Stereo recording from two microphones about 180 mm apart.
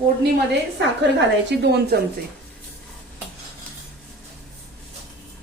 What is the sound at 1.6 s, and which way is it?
Speech, 70° right (ahead or behind).